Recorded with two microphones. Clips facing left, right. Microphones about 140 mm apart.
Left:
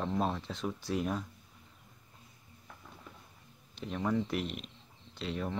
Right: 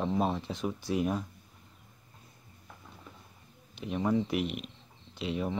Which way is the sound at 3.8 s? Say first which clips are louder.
Right 3 dB; 10° right (ahead or behind).